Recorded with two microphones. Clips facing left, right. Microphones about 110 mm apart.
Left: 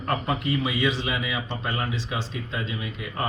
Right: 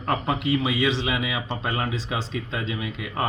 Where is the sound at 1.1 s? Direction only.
15° right (ahead or behind).